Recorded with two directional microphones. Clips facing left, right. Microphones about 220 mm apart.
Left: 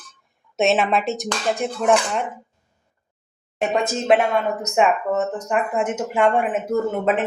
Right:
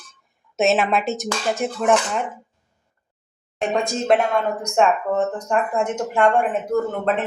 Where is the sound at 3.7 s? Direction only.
5° left (ahead or behind).